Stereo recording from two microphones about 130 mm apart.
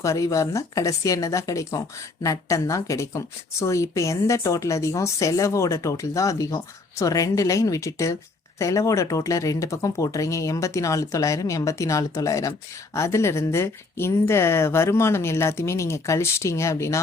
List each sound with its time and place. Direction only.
0.0 s speech: 25° left (ahead or behind)